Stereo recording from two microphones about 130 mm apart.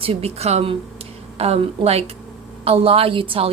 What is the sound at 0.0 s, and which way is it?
A woman's voice, 50° right (ahead or behind).